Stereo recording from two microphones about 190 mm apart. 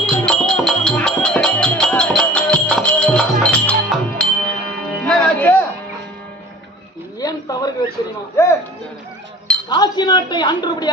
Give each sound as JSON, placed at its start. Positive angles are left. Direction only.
{"t": 0.0, "sound": "music", "side_deg": 5}
{"t": 7.2, "sound": "a sound", "side_deg": 20}
{"t": 9.6, "sound": "speech", "side_deg": 20}